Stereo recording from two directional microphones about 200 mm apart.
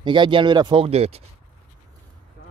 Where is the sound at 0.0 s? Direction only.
25° right (ahead or behind).